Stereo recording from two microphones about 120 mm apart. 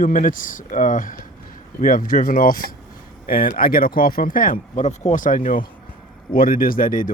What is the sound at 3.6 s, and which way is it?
Speech, 90° left.